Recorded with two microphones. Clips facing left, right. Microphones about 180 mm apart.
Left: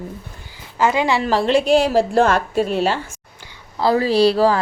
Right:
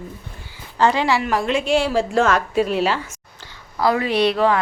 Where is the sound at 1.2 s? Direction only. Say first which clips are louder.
Left 4 dB; 30° left (ahead or behind).